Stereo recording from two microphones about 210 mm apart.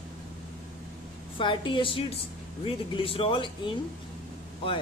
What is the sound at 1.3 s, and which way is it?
Speech, 25° left (ahead or behind).